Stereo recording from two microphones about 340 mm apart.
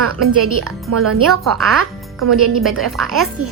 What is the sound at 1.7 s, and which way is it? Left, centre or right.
Music, right.